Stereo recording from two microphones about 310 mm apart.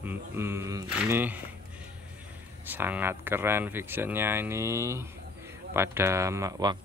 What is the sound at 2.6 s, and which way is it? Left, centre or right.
Speech, centre.